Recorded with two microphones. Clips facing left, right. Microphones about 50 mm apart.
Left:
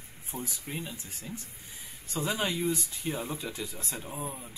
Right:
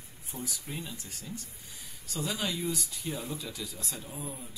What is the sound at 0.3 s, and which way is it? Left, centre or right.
Speech, left.